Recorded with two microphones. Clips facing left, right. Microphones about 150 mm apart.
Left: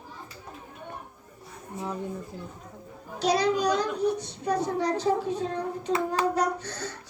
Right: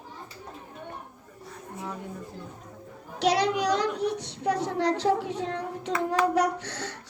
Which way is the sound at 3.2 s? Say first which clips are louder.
Even; 90° right.